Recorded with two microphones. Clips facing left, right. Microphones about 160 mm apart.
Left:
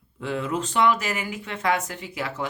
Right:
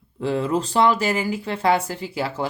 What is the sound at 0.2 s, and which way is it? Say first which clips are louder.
Speech: right 5 dB; 35° right (ahead or behind).